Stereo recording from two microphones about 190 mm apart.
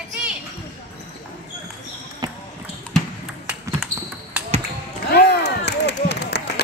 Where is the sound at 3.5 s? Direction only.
10° right (ahead or behind).